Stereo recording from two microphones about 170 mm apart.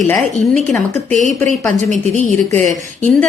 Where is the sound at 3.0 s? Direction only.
5° left (ahead or behind).